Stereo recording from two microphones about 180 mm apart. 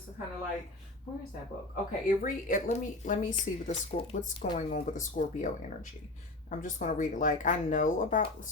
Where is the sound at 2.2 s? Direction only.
50° left (ahead or behind).